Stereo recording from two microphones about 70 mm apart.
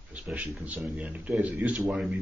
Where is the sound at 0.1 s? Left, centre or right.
Right.